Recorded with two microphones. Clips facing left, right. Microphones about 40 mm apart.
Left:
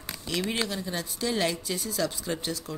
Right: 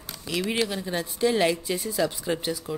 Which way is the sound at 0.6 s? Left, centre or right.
Centre.